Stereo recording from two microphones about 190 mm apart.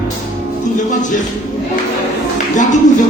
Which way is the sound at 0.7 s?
40° left (ahead or behind).